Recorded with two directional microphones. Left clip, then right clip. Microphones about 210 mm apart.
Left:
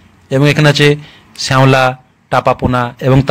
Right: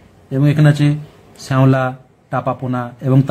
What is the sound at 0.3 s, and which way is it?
A man's voice, 25° left (ahead or behind).